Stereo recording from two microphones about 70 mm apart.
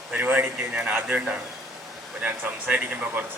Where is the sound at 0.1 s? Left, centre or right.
Right.